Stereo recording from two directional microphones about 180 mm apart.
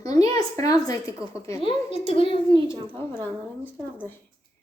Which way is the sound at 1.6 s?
30° left (ahead or behind).